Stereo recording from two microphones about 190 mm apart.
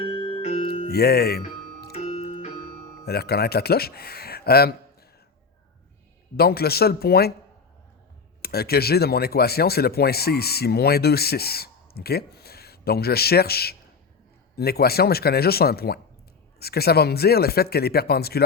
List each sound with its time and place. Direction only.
0.3 s music: 30° left (ahead or behind)
0.9 s speech: 55° left (ahead or behind)
1.9 s music: 30° left (ahead or behind)
3.1 s speech: 55° left (ahead or behind)
6.3 s speech: 55° left (ahead or behind)
8.4 s speech: 55° left (ahead or behind)